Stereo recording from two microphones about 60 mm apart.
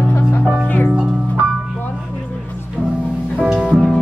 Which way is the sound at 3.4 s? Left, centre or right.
Centre.